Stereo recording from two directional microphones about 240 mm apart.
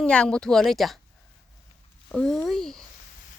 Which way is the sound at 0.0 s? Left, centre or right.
Centre.